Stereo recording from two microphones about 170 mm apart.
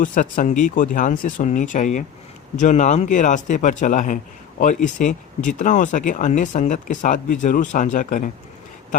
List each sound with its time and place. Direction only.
0.0 s speech: 50° left (ahead or behind)